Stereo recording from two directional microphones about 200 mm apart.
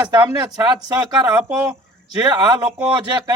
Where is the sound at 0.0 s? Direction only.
20° right (ahead or behind).